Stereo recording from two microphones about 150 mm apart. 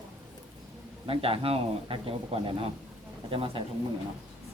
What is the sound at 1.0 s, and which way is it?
Speech, 35° right (ahead or behind).